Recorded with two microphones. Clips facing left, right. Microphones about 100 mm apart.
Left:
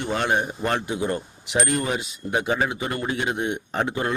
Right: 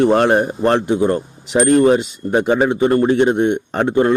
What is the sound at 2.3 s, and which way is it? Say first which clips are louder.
Speech: right 9 dB; 30° right (ahead or behind).